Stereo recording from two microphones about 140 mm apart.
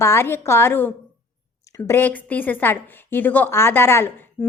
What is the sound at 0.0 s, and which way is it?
Speech, 20° left (ahead or behind).